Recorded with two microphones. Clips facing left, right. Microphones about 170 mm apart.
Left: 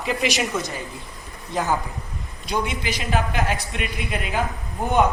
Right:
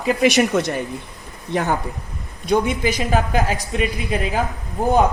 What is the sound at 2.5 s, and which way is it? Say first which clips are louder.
Speech: right 7 dB; 50° right (ahead or behind).